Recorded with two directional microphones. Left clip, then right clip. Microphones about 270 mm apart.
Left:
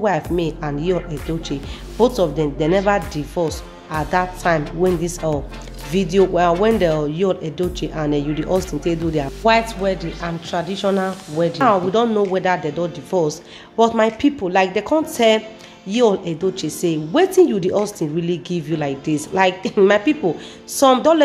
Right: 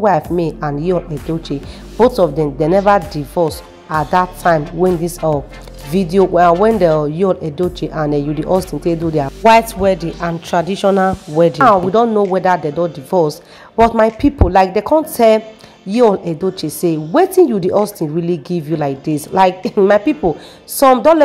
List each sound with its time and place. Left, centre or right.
0.0 s a woman's voice: centre
9.5 s a woman's voice: right
11.6 s speech: centre